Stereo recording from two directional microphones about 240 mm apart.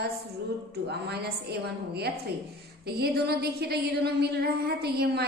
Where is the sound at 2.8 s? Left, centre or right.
Right.